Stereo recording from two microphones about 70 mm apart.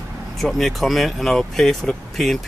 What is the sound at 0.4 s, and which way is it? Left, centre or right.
Speech, centre.